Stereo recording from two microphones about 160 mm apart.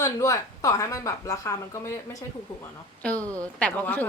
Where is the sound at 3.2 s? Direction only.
20° right (ahead or behind).